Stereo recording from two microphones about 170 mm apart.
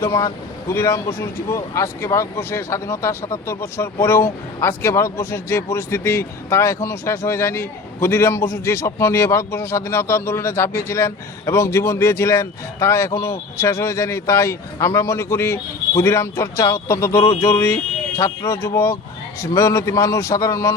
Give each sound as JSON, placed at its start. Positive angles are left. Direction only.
{"t": 0.0, "sound": "speech", "side_deg": 15}